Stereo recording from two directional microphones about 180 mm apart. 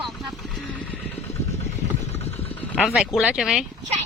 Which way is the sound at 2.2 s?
10° left (ahead or behind).